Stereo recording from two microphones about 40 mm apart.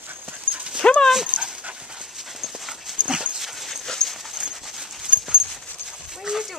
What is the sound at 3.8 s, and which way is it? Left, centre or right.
Dog, centre.